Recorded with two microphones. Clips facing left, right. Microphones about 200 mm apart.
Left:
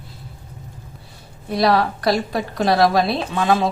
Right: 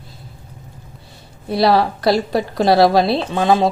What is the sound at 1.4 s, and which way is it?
A woman's voice, 30° right (ahead or behind).